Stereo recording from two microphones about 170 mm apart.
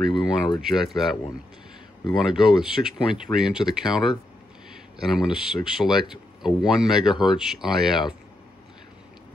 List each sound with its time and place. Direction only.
0.1 s speech: 25° left (ahead or behind)
0.6 s speech: centre (ahead or behind)
5.0 s speech: centre (ahead or behind)